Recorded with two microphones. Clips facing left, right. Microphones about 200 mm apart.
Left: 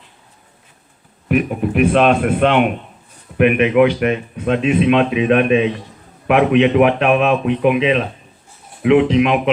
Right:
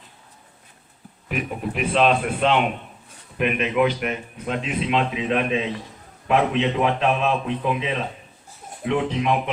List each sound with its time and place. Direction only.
1.3 s a man's voice: 55° left (ahead or behind); by 9.4 s 85° left